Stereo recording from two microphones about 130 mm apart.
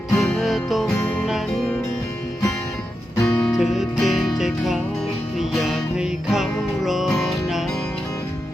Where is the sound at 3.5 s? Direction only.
Centre (ahead or behind).